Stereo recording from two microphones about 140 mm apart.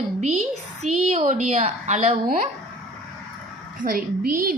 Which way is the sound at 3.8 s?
90° right.